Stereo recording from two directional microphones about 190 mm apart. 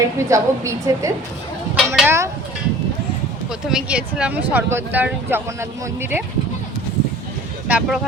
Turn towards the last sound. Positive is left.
turn(degrees=-5)  # may be behind; listen again after turning